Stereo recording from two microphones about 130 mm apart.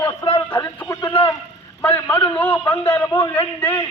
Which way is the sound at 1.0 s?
40° left (ahead or behind).